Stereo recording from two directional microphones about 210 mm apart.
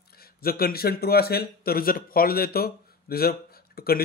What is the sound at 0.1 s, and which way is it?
Speech, 45° left (ahead or behind).